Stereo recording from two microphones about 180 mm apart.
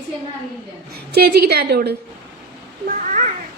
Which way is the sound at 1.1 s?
60° right (ahead or behind).